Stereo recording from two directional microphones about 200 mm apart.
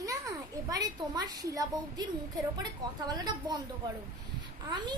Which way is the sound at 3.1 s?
20° right (ahead or behind).